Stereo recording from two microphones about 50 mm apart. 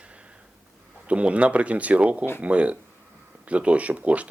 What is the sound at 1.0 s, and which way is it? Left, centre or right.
Speech, right.